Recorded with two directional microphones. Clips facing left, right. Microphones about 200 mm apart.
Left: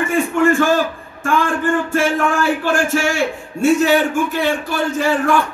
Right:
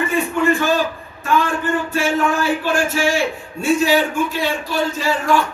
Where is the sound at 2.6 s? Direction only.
50° left (ahead or behind).